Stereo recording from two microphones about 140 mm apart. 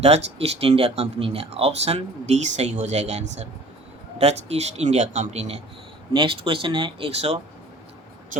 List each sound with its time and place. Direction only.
0.0 s speech: 50° right (ahead or behind)
6.1 s speech: 40° right (ahead or behind)